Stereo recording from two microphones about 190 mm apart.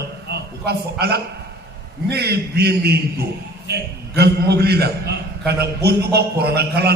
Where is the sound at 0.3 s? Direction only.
60° right (ahead or behind).